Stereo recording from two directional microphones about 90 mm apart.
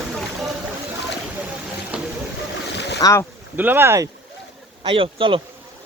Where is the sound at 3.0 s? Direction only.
35° left (ahead or behind).